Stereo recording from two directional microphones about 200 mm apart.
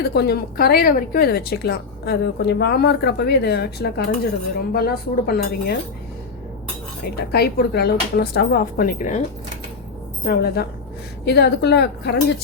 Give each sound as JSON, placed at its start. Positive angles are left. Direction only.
{"t": 0.0, "sound": "a woman's voice", "side_deg": 50}
{"t": 7.2, "sound": "a woman's voice", "side_deg": 55}
{"t": 10.2, "sound": "a woman's voice", "side_deg": 50}